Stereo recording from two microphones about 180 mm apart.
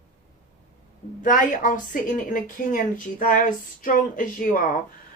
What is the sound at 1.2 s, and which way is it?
A woman's voice, 45° left (ahead or behind).